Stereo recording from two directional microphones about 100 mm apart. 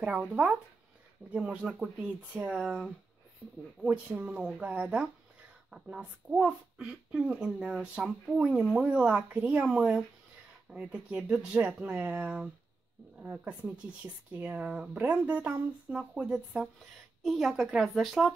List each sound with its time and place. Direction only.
0.0 s speech: 15° right (ahead or behind)
3.8 s a woman's voice: 10° right (ahead or behind)